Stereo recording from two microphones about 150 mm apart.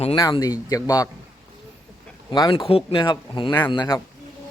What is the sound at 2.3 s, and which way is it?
A man's voice, 30° left (ahead or behind).